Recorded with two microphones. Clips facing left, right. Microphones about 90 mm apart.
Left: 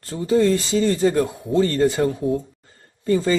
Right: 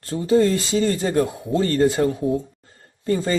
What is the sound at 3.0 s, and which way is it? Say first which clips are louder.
Speech: left 2 dB; 40° right (ahead or behind).